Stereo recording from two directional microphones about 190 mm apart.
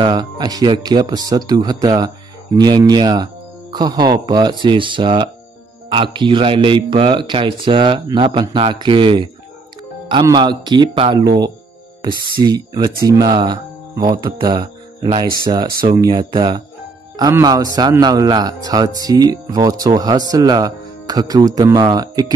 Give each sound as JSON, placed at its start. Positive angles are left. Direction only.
{"t": 0.0, "sound": "a man's voice", "side_deg": -20}